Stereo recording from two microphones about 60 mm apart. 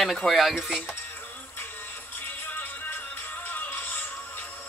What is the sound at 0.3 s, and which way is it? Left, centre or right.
Speech, centre.